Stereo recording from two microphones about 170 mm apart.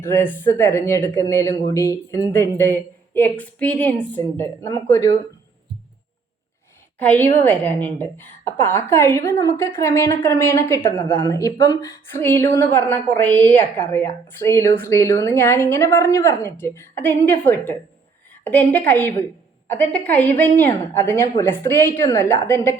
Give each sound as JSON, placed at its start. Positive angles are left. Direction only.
{"t": 0.0, "sound": "a woman's voice", "side_deg": 10}
{"t": 7.0, "sound": "a woman's voice", "side_deg": 10}